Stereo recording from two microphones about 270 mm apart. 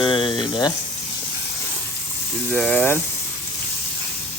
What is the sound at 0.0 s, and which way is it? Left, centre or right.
Sizzle, centre.